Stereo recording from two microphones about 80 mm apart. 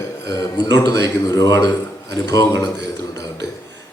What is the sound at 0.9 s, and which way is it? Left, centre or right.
A man's voice, left.